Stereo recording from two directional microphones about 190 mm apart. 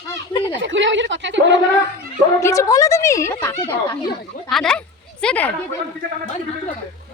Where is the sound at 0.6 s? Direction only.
75° right (ahead or behind).